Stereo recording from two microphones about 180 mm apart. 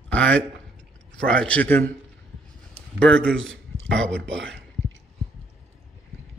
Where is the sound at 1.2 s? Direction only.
5° left (ahead or behind).